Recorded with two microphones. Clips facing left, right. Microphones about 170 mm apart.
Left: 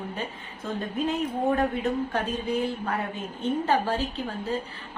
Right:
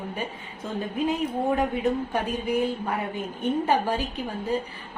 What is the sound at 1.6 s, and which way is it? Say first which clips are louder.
Speech: right 1 dB; 10° right (ahead or behind).